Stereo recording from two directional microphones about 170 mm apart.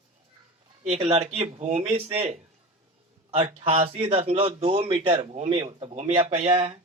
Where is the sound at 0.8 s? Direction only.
40° right (ahead or behind).